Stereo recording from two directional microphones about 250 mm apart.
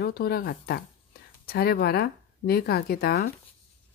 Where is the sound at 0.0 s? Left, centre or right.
Left.